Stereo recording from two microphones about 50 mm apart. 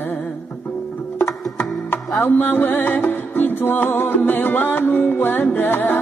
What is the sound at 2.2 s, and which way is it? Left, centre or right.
Music, left.